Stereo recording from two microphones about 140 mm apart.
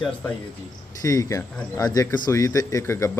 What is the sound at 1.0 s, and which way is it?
Speech, 25° left (ahead or behind).